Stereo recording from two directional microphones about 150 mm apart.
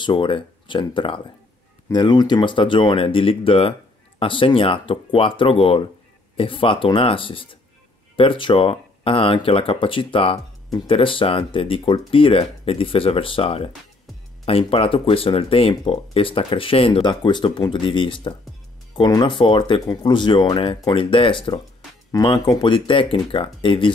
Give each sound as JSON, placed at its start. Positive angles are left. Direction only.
{"t": 0.0, "sound": "speech", "side_deg": 35}